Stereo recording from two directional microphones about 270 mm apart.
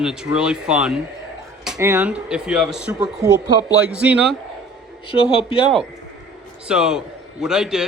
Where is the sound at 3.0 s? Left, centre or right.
Centre.